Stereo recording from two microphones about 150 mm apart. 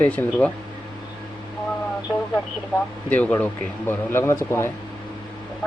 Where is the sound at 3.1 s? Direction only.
10° left (ahead or behind).